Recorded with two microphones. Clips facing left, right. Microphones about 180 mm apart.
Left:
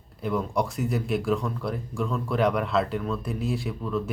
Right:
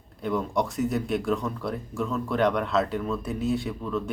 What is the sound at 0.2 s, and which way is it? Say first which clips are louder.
Speech: even; centre (ahead or behind).